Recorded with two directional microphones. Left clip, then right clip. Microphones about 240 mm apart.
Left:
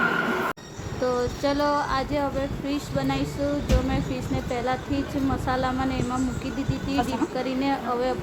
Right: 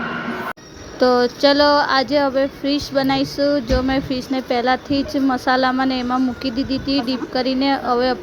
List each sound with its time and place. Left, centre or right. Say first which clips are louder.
1.0 s speech: right 10 dB; right